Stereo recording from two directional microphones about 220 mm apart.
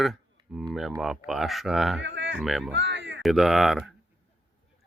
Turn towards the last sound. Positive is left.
turn(degrees=0)  # may be behind; listen again after turning